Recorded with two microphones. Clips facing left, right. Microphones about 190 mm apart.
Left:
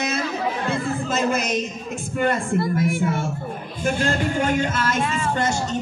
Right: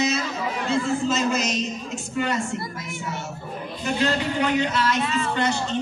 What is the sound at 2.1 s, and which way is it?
Music, 55° left (ahead or behind).